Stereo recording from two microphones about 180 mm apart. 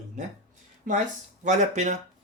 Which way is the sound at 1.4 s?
40° right (ahead or behind).